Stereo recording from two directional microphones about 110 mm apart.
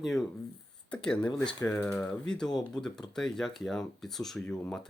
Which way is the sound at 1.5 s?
20° left (ahead or behind).